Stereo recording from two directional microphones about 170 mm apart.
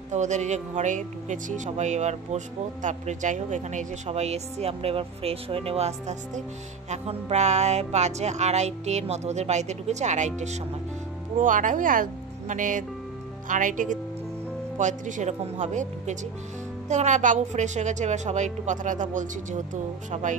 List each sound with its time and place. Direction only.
0.1 s speech: 45° right (ahead or behind)